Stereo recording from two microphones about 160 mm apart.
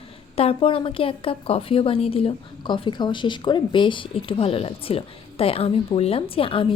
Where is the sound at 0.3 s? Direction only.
35° left (ahead or behind).